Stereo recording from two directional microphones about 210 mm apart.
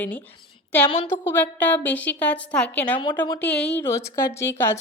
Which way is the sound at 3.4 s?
5° left (ahead or behind).